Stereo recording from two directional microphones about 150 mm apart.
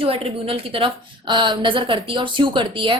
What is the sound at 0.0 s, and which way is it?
A woman's voice, 40° right (ahead or behind).